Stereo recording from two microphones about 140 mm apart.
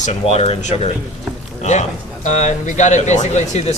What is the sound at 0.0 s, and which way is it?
Speech, 50° left (ahead or behind).